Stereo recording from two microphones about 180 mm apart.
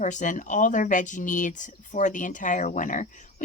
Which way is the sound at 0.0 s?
45° left (ahead or behind).